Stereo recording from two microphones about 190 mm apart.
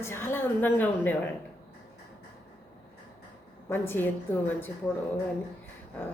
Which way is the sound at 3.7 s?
10° left (ahead or behind).